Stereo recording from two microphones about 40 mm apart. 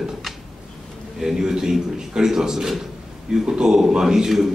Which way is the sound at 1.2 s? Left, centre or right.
Centre.